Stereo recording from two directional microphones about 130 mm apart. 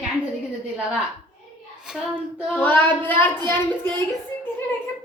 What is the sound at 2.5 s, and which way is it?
A woman's voice, 15° left (ahead or behind).